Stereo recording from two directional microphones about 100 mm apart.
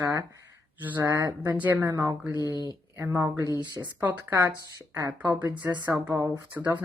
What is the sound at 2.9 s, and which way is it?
Speech, 20° right (ahead or behind).